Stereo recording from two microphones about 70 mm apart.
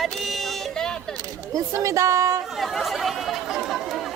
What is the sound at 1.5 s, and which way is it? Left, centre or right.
Speech, right.